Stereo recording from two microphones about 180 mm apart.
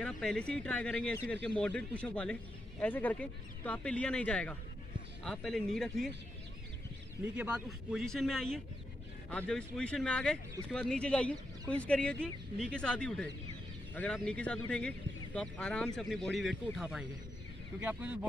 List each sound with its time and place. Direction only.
0.0 s speech: 5° left (ahead or behind)
7.3 s speech: 5° right (ahead or behind)